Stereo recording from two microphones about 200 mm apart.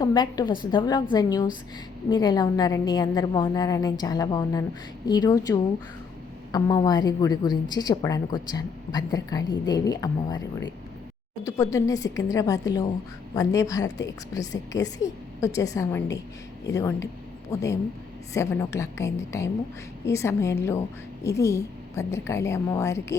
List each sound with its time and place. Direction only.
0.0 s a woman's voice: 20° left (ahead or behind)
11.4 s a woman's voice: 15° left (ahead or behind)